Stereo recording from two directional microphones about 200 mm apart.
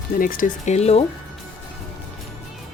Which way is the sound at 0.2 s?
45° left (ahead or behind).